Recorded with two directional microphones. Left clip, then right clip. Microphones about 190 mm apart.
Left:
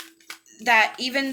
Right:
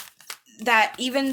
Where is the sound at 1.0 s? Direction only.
35° right (ahead or behind).